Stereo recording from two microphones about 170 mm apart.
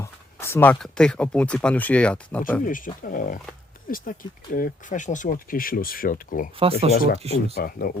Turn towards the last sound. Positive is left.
turn(degrees=55)  # may be behind; listen again after turning